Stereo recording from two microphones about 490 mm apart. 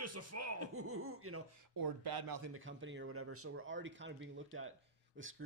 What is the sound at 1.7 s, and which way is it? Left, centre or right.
Speech, right.